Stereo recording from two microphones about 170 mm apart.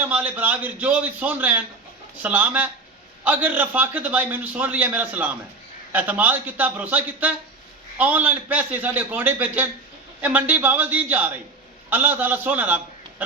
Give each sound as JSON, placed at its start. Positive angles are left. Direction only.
{"t": 0.0, "sound": "a man's voice", "side_deg": -10}